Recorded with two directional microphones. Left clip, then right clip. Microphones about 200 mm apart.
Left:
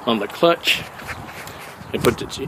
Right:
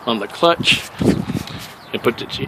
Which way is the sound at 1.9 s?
Centre (ahead or behind).